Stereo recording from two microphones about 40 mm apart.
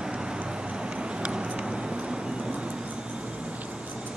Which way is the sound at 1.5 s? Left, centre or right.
Centre.